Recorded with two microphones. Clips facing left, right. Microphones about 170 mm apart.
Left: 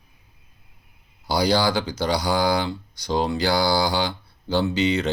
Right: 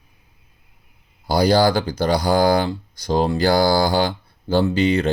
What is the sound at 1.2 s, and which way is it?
Speech, 50° right (ahead or behind).